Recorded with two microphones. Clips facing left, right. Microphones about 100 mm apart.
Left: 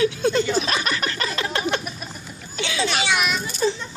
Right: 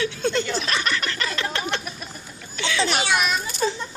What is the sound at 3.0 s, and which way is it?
Speech, 40° right (ahead or behind).